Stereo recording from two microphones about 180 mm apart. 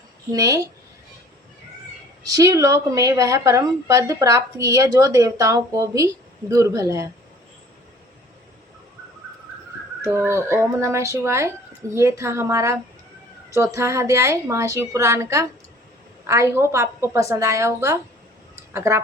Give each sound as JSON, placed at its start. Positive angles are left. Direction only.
{"t": 0.3, "sound": "a woman's voice", "side_deg": -20}
{"t": 2.2, "sound": "a woman's voice", "side_deg": -20}
{"t": 10.2, "sound": "a woman's voice", "side_deg": -15}